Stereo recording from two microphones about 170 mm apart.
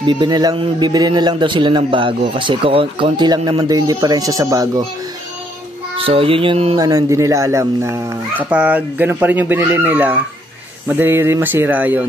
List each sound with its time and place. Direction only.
0.0 s a man's voice: 25° right (ahead or behind)
5.9 s speech: 30° right (ahead or behind); by 12.1 s 10° right (ahead or behind)